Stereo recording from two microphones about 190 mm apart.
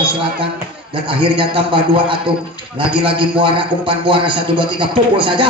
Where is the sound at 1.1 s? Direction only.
25° right (ahead or behind).